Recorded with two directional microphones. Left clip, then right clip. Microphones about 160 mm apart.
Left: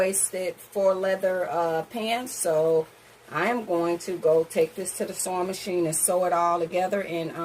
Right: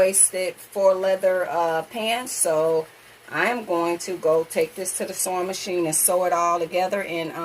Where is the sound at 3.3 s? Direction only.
30° left (ahead or behind).